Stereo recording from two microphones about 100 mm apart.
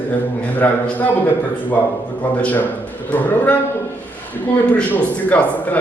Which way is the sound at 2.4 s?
15° left (ahead or behind).